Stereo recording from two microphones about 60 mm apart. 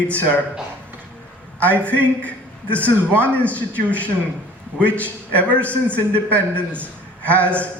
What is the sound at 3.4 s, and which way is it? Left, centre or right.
Speech, left.